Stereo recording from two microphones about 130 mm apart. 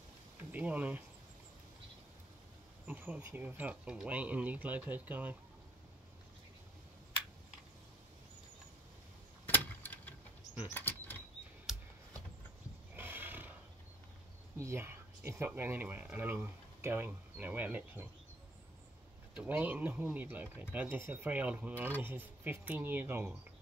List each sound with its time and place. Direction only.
0.5 s speech: 10° right (ahead or behind)
2.9 s speech: 10° right (ahead or behind)
9.5 s keys jangling: 15° left (ahead or behind)
10.7 s a sound: 15° left (ahead or behind)
11.7 s camera: 5° right (ahead or behind)
12.9 s horse: 15° right (ahead or behind)
14.6 s speech: 20° right (ahead or behind)
19.3 s speech: 10° right (ahead or behind)